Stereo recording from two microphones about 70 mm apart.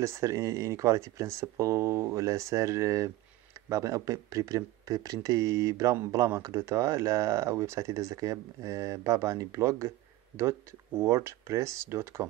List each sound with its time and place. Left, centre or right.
0.0 s speech: right